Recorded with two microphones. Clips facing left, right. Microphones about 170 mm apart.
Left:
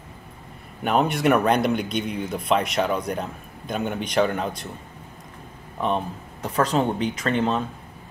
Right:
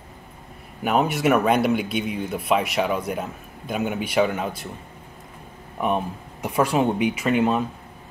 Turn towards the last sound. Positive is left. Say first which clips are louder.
# right 2 dB
turn(degrees=-10)  # may be behind; listen again after turning